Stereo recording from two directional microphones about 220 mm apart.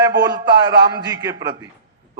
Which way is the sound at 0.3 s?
15° right (ahead or behind).